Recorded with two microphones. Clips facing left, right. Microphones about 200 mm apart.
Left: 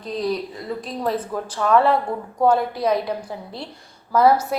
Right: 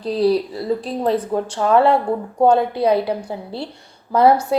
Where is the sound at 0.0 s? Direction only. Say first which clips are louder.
Right 7 dB; 35° right (ahead or behind).